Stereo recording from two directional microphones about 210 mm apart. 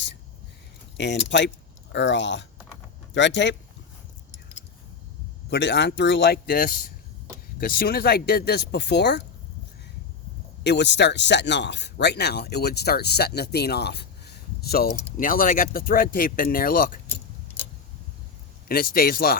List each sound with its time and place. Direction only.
0.9 s speech: 55° left (ahead or behind)
5.5 s speech: 55° left (ahead or behind)
10.6 s speech: 55° left (ahead or behind)
18.7 s speech: 45° left (ahead or behind)